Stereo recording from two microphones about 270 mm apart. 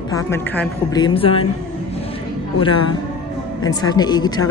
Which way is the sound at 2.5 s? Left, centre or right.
Centre.